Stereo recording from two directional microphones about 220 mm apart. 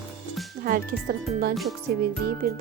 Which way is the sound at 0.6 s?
40° right (ahead or behind).